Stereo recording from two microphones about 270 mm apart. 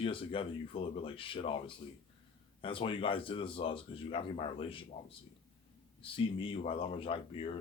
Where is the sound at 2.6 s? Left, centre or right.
Centre.